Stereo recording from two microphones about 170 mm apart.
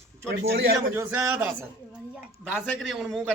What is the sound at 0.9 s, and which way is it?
Speech, 10° right (ahead or behind).